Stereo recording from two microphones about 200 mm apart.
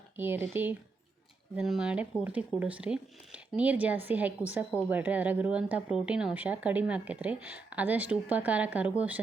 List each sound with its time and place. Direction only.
0.2 s speech: 10° right (ahead or behind)